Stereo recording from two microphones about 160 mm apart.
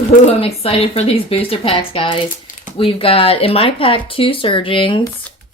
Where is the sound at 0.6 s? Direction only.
40° left (ahead or behind).